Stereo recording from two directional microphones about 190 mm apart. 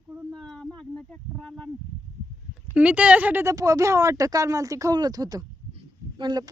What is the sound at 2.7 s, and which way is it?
A woman's voice, 5° right (ahead or behind).